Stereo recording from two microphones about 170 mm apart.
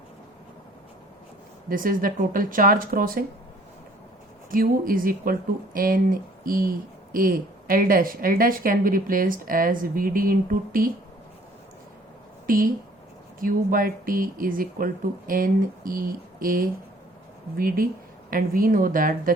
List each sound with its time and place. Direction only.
1.7 s speech: 55° right (ahead or behind)
4.5 s speech: 55° right (ahead or behind)
12.5 s speech: 55° right (ahead or behind)